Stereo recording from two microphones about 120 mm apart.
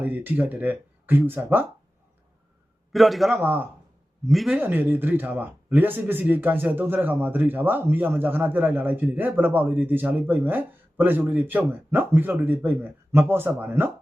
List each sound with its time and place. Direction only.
0.0 s a man's voice: 15° right (ahead or behind)
2.9 s a man's voice: centre (ahead or behind)
3.4 s a man's voice: 15° right (ahead or behind)
4.3 s a man's voice: centre (ahead or behind)
4.5 s a man's voice: 15° right (ahead or behind)